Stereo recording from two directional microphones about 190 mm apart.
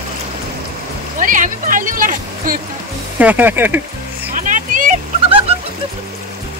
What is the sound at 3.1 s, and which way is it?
Speech, 10° right (ahead or behind).